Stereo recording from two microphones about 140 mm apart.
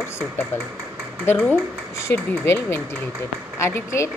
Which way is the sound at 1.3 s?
5° left (ahead or behind).